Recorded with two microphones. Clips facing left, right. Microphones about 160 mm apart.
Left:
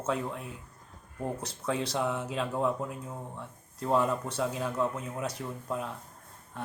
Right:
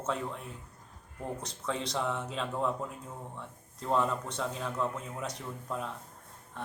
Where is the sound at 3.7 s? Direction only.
10° left (ahead or behind).